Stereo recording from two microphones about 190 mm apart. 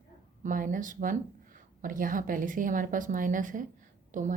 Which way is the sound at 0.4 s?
45° right (ahead or behind).